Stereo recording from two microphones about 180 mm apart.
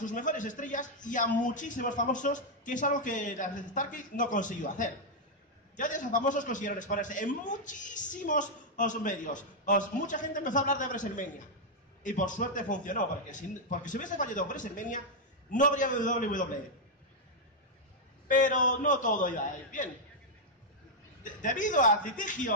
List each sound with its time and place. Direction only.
0.0 s a man's voice: 45° left (ahead or behind)
18.3 s a man's voice: 45° left (ahead or behind)
21.2 s a man's voice: 45° left (ahead or behind)